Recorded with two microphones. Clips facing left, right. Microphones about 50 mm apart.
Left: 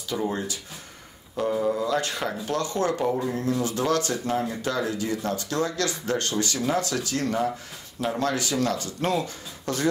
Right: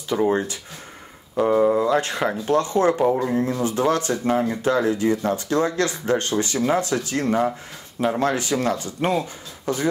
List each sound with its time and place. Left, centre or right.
0.1 s speech: right; by 9.8 s centre